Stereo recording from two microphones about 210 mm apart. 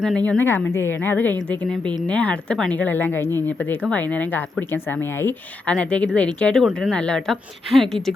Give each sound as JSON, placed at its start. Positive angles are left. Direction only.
{"t": 0.3, "sound": "a woman's voice", "side_deg": 10}